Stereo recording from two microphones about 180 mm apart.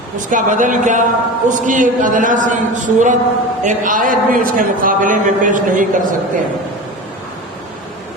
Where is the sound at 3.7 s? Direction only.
50° right (ahead or behind).